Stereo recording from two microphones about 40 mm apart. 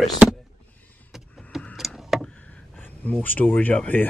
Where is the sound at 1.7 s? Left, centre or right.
Centre.